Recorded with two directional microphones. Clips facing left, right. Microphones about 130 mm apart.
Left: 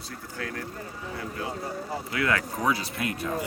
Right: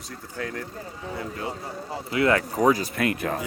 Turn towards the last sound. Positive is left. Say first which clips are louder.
# right 5 dB
turn(degrees=-70)  # may be behind; listen again after turning